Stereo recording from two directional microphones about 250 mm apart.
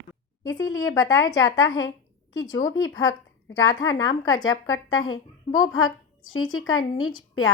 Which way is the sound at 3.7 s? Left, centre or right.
Centre.